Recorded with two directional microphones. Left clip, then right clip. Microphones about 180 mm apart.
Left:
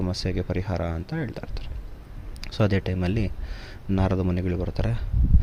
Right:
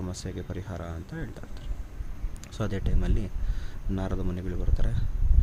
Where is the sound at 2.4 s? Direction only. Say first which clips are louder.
Left 9 dB; 30° left (ahead or behind).